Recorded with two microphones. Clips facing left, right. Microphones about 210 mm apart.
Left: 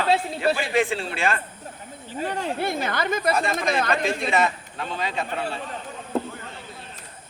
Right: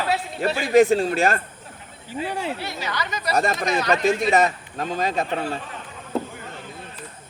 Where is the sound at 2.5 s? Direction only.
50° left (ahead or behind).